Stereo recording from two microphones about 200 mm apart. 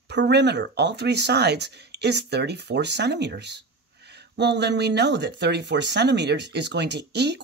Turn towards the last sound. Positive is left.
turn(degrees=-55)  # may be behind; listen again after turning